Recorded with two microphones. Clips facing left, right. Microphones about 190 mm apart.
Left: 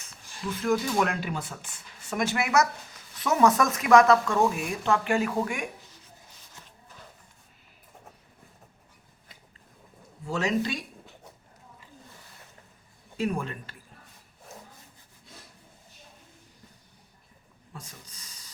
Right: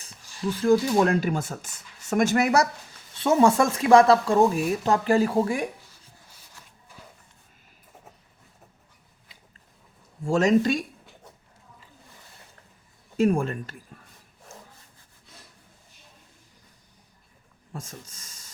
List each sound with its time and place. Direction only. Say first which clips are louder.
0.0 s speech: right 6 dB; 35° right (ahead or behind)
10.2 s speech: right 7 dB; 45° right (ahead or behind)
13.1 s speech: right 7 dB; 45° right (ahead or behind)
17.7 s a sound: right 7 dB; 45° right (ahead or behind)